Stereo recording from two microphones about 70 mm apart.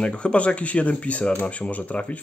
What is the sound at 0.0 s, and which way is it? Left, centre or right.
Speech, centre.